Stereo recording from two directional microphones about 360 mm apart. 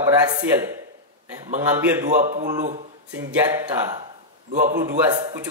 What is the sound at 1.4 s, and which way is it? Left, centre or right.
Speech, centre.